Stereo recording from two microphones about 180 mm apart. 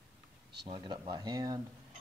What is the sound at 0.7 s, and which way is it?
Speech, 25° right (ahead or behind).